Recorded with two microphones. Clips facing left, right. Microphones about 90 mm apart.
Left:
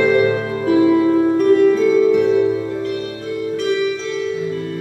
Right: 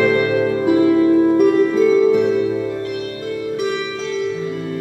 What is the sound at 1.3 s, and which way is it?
Music, 10° right (ahead or behind).